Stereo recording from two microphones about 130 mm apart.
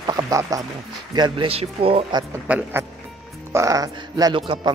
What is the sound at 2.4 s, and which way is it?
Speech, 10° right (ahead or behind).